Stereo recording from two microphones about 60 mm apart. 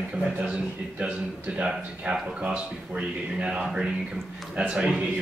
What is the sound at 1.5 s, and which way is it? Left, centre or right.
Speech, centre.